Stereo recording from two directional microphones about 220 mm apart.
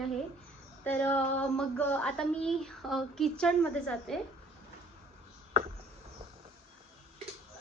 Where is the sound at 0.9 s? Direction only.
10° left (ahead or behind).